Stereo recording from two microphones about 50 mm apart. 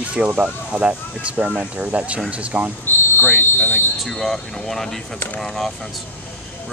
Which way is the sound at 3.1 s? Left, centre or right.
Left.